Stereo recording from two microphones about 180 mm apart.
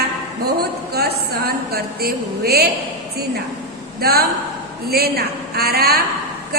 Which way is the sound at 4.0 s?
60° right (ahead or behind).